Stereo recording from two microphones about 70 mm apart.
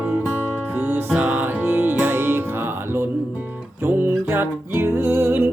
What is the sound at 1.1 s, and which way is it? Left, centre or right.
Music, centre.